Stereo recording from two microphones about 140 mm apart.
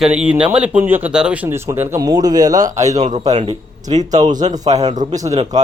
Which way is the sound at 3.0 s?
55° right (ahead or behind).